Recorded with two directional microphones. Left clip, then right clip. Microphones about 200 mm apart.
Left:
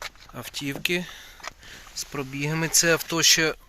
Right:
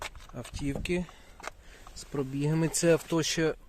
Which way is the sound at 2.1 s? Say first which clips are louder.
Left 2 dB; 20° right (ahead or behind).